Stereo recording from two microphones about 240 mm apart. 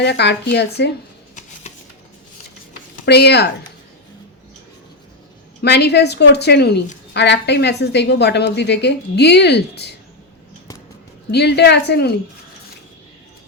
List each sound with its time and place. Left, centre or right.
0.0 s a woman's voice: left
3.1 s a woman's voice: left
5.6 s a woman's voice: left
11.3 s a woman's voice: left